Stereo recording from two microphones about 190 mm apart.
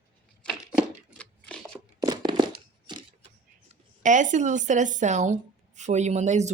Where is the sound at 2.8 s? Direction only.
30° right (ahead or behind).